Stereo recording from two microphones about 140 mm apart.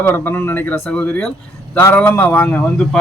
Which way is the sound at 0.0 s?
15° left (ahead or behind).